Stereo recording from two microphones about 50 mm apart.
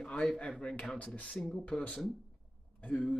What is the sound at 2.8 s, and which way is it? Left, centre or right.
Speech, left.